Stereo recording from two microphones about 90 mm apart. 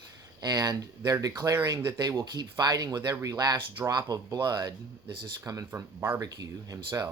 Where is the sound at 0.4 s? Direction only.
45° right (ahead or behind).